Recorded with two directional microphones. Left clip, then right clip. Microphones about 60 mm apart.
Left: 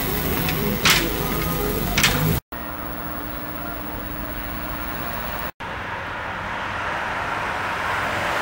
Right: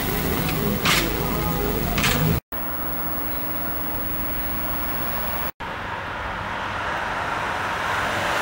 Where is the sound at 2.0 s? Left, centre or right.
Left.